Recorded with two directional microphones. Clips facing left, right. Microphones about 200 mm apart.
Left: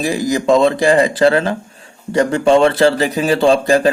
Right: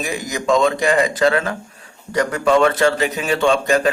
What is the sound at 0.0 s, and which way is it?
Speech, 35° left (ahead or behind).